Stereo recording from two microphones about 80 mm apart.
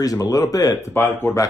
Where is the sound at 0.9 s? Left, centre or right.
Left.